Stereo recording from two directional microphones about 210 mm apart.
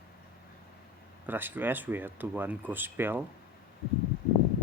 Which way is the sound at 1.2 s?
10° right (ahead or behind).